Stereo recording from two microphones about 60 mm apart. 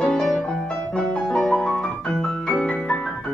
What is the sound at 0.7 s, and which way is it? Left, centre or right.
Music, centre.